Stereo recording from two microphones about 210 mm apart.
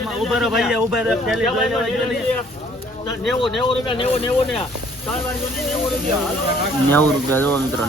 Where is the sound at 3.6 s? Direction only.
25° left (ahead or behind).